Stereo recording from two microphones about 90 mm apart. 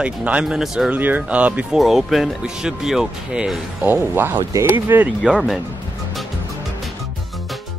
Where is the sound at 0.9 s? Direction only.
20° right (ahead or behind).